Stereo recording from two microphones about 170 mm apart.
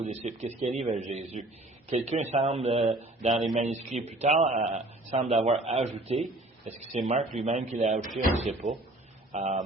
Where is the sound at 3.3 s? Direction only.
Centre (ahead or behind).